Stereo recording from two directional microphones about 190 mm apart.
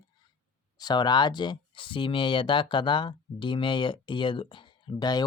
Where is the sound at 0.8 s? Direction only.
20° left (ahead or behind).